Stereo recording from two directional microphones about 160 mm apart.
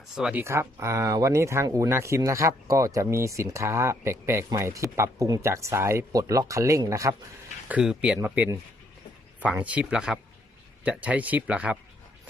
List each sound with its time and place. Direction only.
0.2 s speech: 5° right (ahead or behind)
0.4 s speech: 15° right (ahead or behind)
7.7 s speech: 5° right (ahead or behind)